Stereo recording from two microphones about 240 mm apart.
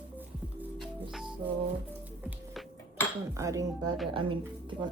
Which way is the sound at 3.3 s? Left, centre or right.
Centre.